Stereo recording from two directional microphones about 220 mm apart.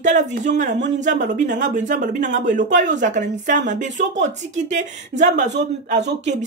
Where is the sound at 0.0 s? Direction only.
35° right (ahead or behind).